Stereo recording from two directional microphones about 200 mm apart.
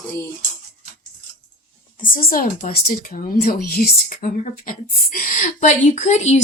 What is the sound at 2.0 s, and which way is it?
A woman's voice, 45° left (ahead or behind).